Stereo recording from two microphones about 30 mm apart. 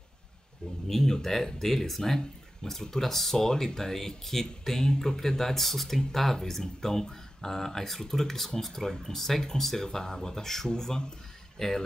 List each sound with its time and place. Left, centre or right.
0.8 s speech: centre
2.1 s speech: centre